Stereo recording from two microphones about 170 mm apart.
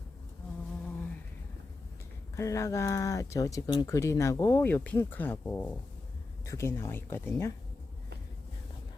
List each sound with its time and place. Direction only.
2.3 s speech: 20° left (ahead or behind)